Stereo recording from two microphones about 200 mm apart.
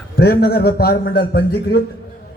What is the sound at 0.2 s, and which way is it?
A man's voice, 50° left (ahead or behind).